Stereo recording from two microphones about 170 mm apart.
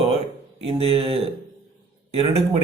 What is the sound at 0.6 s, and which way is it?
A man's voice, 35° right (ahead or behind).